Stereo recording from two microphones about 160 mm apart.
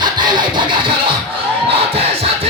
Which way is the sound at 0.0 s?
30° right (ahead or behind).